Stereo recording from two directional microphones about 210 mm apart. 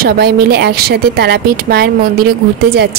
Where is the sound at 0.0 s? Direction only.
50° right (ahead or behind).